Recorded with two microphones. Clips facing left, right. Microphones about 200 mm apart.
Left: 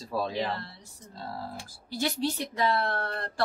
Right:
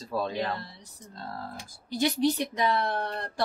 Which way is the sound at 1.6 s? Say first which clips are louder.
Right 5 dB; 15° right (ahead or behind).